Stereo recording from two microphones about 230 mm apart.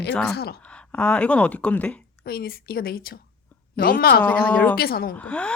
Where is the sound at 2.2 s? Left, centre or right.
Left.